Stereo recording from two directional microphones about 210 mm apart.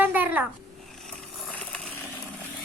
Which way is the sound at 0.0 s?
10° right (ahead or behind).